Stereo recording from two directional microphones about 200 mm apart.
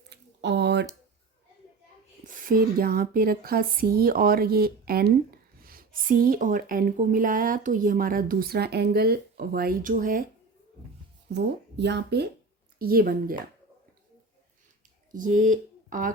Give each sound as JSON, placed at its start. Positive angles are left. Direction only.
{"t": 0.1, "sound": "a sound", "side_deg": -60}
{"t": 2.2, "sound": "speech", "side_deg": -40}
{"t": 11.3, "sound": "speech", "side_deg": -60}
{"t": 12.8, "sound": "speech", "side_deg": -45}
{"t": 15.1, "sound": "speech", "side_deg": -40}